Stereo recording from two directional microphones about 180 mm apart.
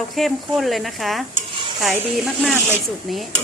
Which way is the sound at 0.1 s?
Centre (ahead or behind).